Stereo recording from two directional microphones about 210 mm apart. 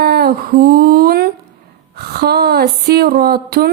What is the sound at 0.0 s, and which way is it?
Speech, 50° right (ahead or behind).